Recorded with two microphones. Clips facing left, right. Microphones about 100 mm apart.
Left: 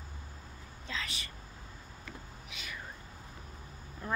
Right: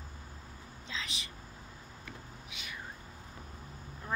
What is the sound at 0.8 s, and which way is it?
Whispering, 15° right (ahead or behind).